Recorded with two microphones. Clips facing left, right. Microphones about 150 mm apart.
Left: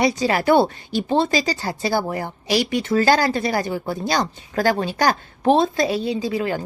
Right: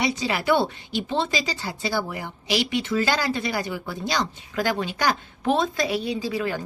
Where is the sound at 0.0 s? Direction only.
40° left (ahead or behind).